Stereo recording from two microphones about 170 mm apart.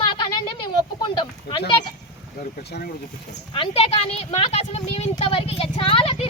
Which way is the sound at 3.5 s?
35° left (ahead or behind).